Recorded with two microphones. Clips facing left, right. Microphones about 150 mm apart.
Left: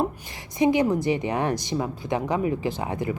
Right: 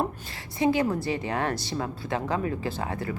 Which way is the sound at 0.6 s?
20° left (ahead or behind).